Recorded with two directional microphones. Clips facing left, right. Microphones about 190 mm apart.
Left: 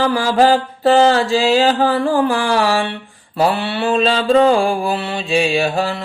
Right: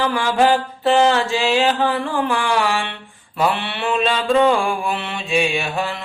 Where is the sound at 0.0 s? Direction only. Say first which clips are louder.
Left 3 dB; 35° left (ahead or behind).